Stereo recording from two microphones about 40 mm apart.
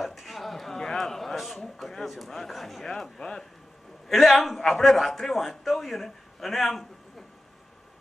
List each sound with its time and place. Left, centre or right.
0.0 s a sound: centre
1.6 s speech: centre
3.2 s speech: centre
4.1 s a man's voice: centre